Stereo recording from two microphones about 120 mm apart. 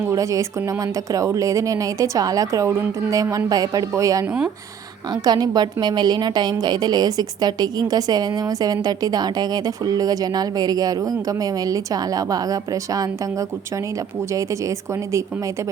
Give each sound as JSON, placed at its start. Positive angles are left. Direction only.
{"t": 0.1, "sound": "a woman's voice", "side_deg": -25}